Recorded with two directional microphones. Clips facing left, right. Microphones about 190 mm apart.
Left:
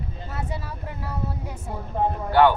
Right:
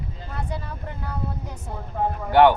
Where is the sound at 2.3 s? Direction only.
15° right (ahead or behind).